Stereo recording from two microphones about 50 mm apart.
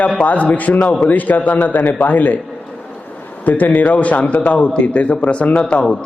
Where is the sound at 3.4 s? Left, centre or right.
Left.